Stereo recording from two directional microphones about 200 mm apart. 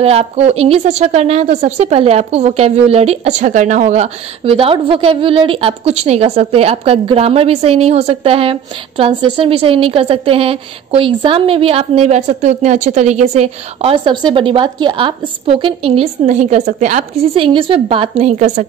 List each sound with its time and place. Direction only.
0.0 s a woman's voice: 30° right (ahead or behind)